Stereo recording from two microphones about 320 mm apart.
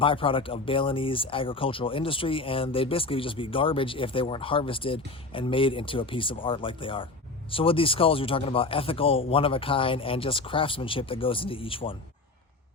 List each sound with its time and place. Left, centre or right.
0.0 s speech: centre